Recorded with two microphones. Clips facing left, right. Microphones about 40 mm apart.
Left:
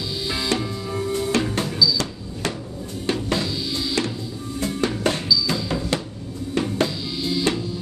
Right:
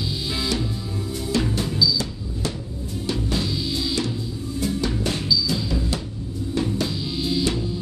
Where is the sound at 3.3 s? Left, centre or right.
Left.